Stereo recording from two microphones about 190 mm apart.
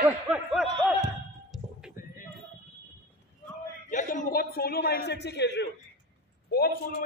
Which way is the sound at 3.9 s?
45° left (ahead or behind).